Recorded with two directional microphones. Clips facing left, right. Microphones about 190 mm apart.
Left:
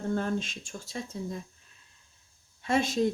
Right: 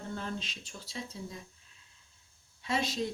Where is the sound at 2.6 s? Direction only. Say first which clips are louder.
Left 6 dB; 50° left (ahead or behind).